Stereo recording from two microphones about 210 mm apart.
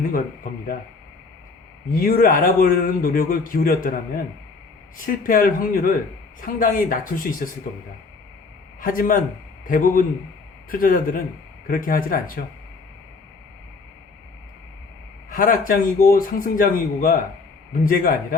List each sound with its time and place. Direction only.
1.9 s speech: 45° left (ahead or behind)
8.8 s speech: 40° left (ahead or behind)
15.3 s speech: 40° left (ahead or behind)